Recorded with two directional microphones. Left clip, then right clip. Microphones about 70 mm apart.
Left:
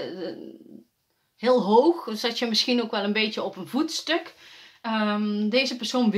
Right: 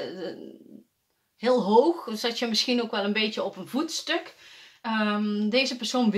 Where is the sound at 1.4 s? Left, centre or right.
Centre; by 4.2 s left.